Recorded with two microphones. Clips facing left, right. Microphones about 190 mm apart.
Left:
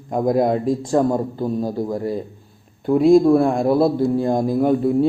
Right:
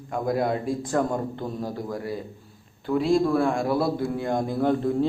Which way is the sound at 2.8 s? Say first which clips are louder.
Left 9 dB; 50° left (ahead or behind).